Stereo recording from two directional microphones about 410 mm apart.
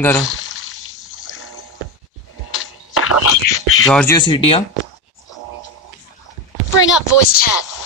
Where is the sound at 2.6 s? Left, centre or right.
Left.